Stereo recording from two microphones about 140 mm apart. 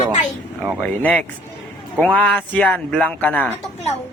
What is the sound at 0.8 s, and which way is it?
A man's voice, 10° left (ahead or behind).